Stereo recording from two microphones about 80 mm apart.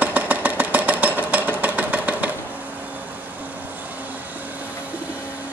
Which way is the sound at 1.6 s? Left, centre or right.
Centre.